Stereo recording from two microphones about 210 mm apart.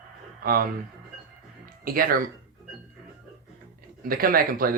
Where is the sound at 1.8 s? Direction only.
40° right (ahead or behind).